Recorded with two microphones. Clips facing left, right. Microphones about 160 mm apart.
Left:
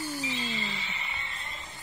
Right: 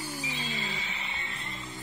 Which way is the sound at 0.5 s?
45° right (ahead or behind).